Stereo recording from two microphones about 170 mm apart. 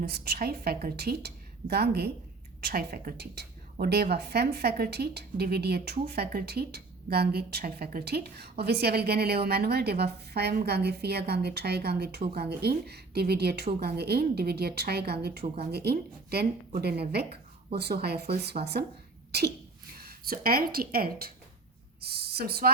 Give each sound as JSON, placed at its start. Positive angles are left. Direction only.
{"t": 0.0, "sound": "a woman's voice", "side_deg": -70}
{"t": 20.0, "sound": "speech", "side_deg": -65}